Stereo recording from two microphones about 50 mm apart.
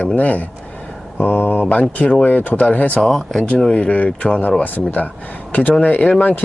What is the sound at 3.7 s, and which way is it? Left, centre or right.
Speech, left.